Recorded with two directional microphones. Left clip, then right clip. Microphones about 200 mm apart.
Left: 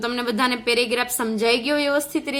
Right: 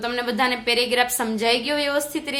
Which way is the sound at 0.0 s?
30° left (ahead or behind).